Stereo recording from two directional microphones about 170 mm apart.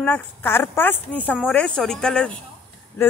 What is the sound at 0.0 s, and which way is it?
Speech, 10° left (ahead or behind).